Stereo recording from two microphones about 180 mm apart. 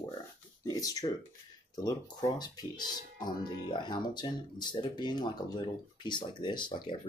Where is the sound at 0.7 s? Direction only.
20° left (ahead or behind).